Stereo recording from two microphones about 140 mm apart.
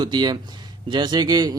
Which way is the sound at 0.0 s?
30° right (ahead or behind).